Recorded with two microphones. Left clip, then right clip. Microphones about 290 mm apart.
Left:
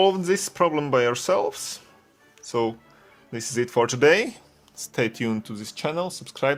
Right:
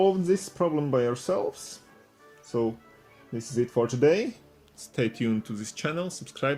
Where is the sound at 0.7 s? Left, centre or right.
Left.